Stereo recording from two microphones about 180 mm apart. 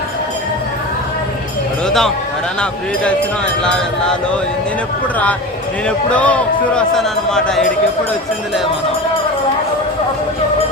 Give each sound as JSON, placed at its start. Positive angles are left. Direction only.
{"t": 1.9, "sound": "a man's voice", "side_deg": 0}
{"t": 6.1, "sound": "a man's voice", "side_deg": 5}